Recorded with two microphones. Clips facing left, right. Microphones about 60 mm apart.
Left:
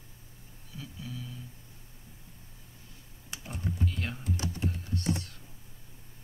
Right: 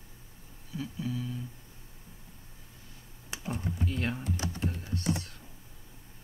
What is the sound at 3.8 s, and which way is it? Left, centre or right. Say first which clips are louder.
Speech: right 4 dB; right.